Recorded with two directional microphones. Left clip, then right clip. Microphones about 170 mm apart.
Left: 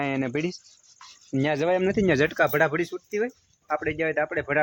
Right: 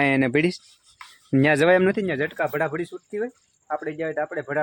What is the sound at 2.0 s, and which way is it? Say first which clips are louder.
Speech: left 4 dB; 55° left (ahead or behind).